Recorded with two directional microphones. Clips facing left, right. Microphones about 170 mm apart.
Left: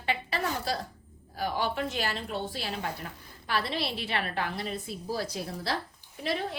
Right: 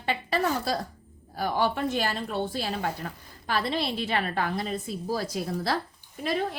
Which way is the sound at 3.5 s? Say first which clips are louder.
Right 3 dB; 45° right (ahead or behind).